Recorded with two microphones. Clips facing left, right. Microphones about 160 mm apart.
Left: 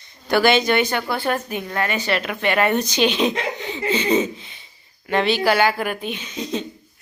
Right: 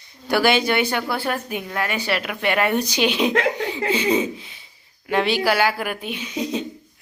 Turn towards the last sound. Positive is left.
turn(degrees=-10)  # may be behind; listen again after turning